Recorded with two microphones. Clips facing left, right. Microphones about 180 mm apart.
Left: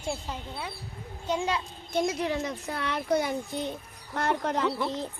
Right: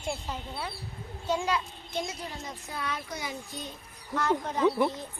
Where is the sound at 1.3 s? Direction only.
25° left (ahead or behind).